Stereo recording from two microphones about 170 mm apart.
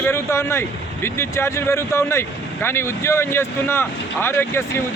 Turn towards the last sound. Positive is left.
turn(degrees=15)  # may be behind; listen again after turning